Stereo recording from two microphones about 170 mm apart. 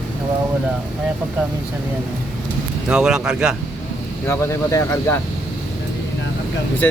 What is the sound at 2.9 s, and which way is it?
Speech, 5° right (ahead or behind).